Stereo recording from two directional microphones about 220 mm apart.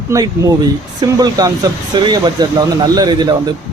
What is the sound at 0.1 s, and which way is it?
A man's voice, 15° right (ahead or behind).